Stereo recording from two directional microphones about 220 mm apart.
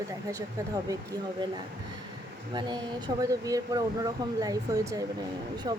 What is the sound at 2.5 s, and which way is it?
Speech, 20° right (ahead or behind).